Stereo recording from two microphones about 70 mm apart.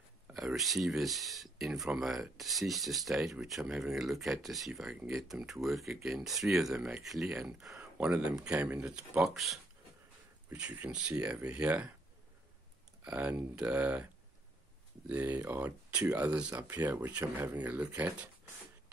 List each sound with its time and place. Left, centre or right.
0.3 s speech: centre
8.0 s speech: centre
9.2 s speech: centre
10.5 s speech: right
13.0 s speech: centre
15.0 s speech: right